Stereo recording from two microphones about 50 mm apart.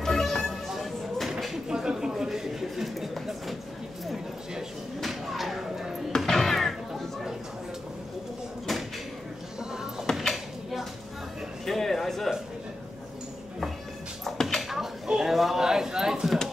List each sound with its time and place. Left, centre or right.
0.0 s music: centre
1.7 s a sound: centre
5.0 s music: centre
6.1 s music: centre
9.6 s music: centre
10.3 s dishes: centre
11.6 s a sound: centre
14.2 s dishes: centre
14.7 s a sound: centre